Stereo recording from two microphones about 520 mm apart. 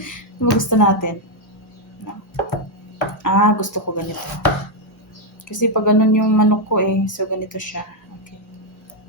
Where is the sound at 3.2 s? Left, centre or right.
Left.